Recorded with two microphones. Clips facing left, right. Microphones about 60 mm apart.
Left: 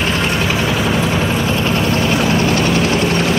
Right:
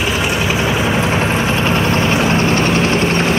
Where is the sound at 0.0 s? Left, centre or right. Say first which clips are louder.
Even; centre.